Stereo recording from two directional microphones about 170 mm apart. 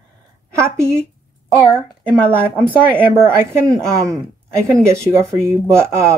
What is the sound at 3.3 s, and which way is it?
Speech, 15° right (ahead or behind).